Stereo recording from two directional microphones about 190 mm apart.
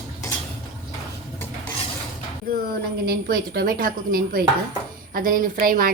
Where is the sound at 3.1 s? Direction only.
55° right (ahead or behind).